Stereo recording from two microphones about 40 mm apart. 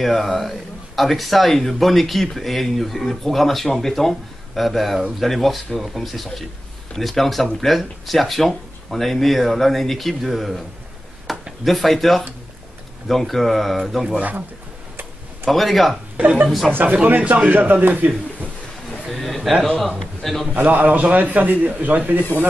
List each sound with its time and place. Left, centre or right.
0.0 s a man's voice: centre
11.3 s a sound: centre
11.6 s a man's voice: centre
15.4 s a man's voice: centre
16.2 s a man's voice: right
19.1 s a sound: centre
20.0 s a man's voice: centre
20.5 s a man's voice: right